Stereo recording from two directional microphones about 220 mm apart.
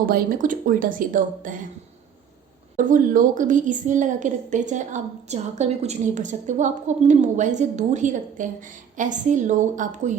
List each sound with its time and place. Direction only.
0.0 s a woman's voice: 40° right (ahead or behind)
2.7 s a woman's voice: 35° right (ahead or behind)